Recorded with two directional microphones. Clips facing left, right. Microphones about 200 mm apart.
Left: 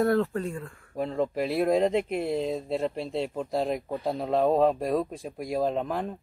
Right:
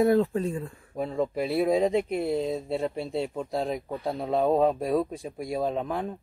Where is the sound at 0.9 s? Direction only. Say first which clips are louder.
Even; 5° right (ahead or behind).